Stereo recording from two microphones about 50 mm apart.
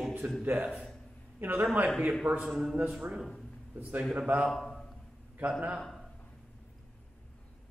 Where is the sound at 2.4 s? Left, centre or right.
Centre.